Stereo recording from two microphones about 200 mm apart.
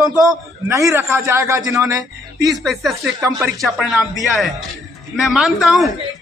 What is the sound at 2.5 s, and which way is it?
A man's voice, centre (ahead or behind).